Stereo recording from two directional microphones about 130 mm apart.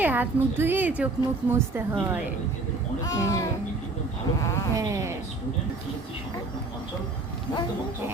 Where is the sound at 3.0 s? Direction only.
25° left (ahead or behind).